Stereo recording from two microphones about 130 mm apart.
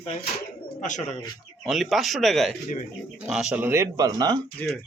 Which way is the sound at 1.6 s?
Centre (ahead or behind).